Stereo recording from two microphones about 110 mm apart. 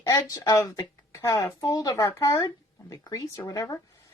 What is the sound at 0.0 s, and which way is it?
Speech, 30° left (ahead or behind).